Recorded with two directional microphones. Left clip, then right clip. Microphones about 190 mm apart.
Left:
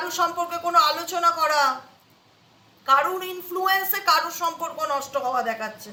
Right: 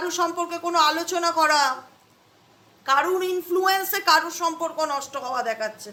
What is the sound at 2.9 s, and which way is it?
A woman's voice, 60° right (ahead or behind).